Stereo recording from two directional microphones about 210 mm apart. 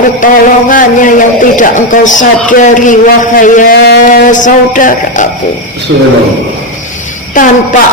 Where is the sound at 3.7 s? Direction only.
50° left (ahead or behind).